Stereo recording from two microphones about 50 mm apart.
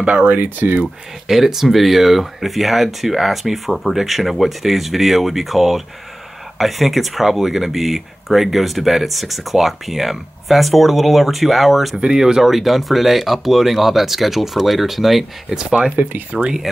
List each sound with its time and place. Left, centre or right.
0.0 s speech: right
1.2 s speech: centre
12.0 s speech: centre
15.6 s speech: right
16.0 s speech: right